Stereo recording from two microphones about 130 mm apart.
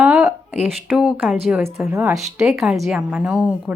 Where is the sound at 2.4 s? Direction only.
5° right (ahead or behind).